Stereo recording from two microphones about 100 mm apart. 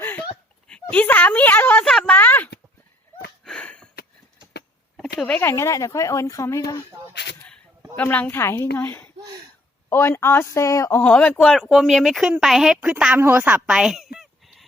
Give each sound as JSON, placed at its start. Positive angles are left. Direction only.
{"t": 0.7, "sound": "speech", "side_deg": 15}
{"t": 1.8, "sound": "speech", "side_deg": 5}
{"t": 2.1, "sound": "speech", "side_deg": 15}
{"t": 3.4, "sound": "sniff", "side_deg": 10}
{"t": 4.9, "sound": "a sound", "side_deg": 10}
{"t": 5.4, "sound": "speech", "side_deg": 30}
{"t": 7.9, "sound": "a woman's voice", "side_deg": 15}
{"t": 9.1, "sound": "a sound", "side_deg": -45}
{"t": 9.9, "sound": "a woman's voice", "side_deg": 25}
{"t": 11.0, "sound": "a woman's voice", "side_deg": 15}
{"t": 13.2, "sound": "a sound", "side_deg": -20}